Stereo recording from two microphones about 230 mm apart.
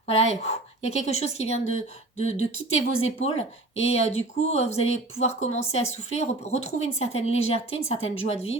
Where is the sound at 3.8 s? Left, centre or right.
Left.